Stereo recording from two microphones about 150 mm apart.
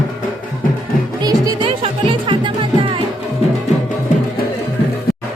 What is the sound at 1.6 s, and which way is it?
Music, 35° right (ahead or behind).